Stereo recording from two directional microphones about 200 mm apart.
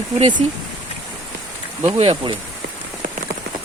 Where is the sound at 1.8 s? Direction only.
30° right (ahead or behind).